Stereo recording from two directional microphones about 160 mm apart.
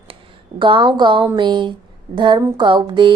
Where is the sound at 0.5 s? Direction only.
30° right (ahead or behind).